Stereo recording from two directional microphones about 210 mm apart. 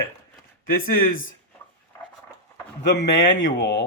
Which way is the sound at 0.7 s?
45° left (ahead or behind).